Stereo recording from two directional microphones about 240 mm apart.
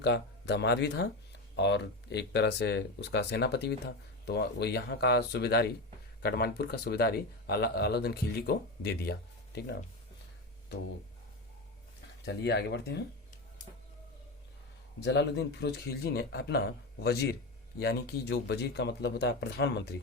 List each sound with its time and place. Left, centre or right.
0.0 s speech: left
12.2 s speech: left
15.0 s speech: left